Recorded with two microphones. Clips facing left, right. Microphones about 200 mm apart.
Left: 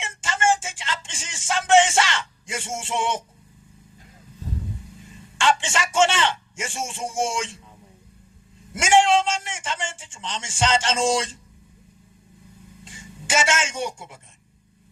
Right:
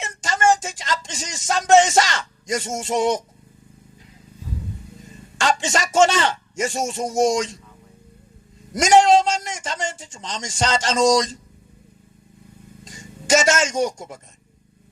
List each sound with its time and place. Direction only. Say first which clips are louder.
0.0 s a sound: right 4 dB; 40° right (ahead or behind)
4.9 s a man's voice: right 2 dB; 40° right (ahead or behind)
8.7 s a man's voice: right 4 dB; 40° right (ahead or behind)
12.8 s a man's voice: right 2 dB; 40° right (ahead or behind)